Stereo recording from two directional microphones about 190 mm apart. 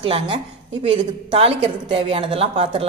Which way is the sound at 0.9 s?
30° right (ahead or behind).